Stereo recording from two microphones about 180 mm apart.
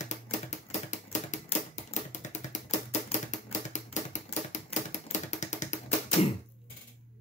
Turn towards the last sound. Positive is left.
turn(degrees=40)  # may be behind; listen again after turning